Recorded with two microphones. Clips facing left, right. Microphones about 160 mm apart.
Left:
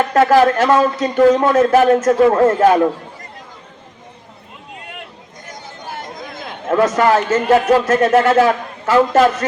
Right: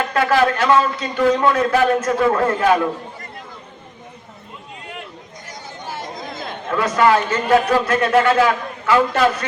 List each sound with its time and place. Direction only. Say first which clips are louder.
0.1 s speech: left 5 dB; 45° left (ahead or behind)
5.5 s chatter: left 1 dB; 55° left (ahead or behind)
6.7 s speech: left 3 dB; 45° left (ahead or behind)